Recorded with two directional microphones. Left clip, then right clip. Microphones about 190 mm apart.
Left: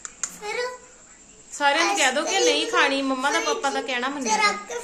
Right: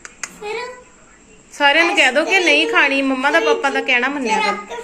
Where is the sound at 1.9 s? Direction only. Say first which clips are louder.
Right 8 dB; centre (ahead or behind).